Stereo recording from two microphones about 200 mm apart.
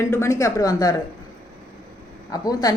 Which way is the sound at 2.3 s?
20° left (ahead or behind).